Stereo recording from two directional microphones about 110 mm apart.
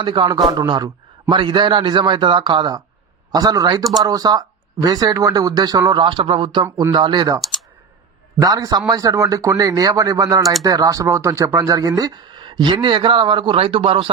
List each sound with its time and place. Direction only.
0.0 s speech: 45° right (ahead or behind)
0.3 s speech: 35° right (ahead or behind)
6.0 s speech: 50° right (ahead or behind)